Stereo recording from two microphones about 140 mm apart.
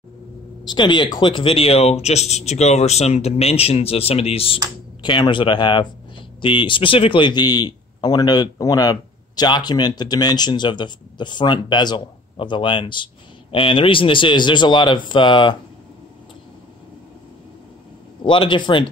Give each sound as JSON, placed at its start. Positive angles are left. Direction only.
{"t": 0.7, "sound": "a man's voice", "side_deg": 35}
{"t": 18.2, "sound": "a man's voice", "side_deg": 35}